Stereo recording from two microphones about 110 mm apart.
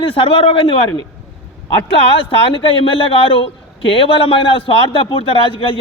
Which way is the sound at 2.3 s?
55° left (ahead or behind).